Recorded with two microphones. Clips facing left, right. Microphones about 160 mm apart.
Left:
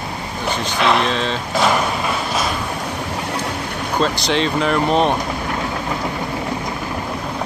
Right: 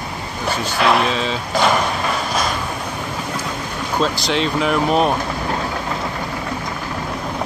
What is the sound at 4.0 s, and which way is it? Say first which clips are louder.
Speech: left 1 dB; centre (ahead or behind).